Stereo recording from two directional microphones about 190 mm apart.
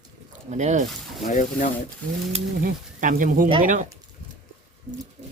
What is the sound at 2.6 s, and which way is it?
Speech, 45° right (ahead or behind).